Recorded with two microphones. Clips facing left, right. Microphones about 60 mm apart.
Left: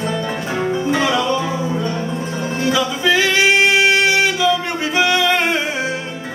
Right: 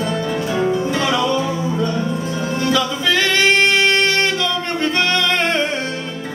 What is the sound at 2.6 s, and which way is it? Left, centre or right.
Music, centre.